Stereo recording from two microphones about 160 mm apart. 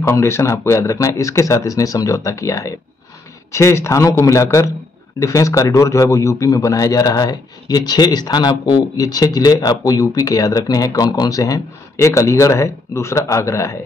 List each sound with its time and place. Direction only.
0.0 s a man's voice: 20° left (ahead or behind)